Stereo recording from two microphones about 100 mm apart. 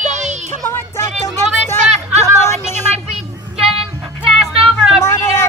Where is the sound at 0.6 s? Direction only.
20° left (ahead or behind).